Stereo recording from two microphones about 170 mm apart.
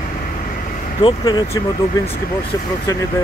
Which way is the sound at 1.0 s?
25° left (ahead or behind).